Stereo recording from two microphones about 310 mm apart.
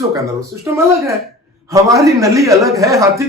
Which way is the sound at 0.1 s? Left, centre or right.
Centre.